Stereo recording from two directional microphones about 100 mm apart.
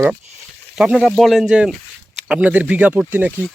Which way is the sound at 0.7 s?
5° right (ahead or behind).